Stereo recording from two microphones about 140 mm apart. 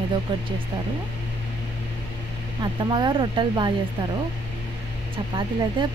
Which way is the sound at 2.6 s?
35° right (ahead or behind).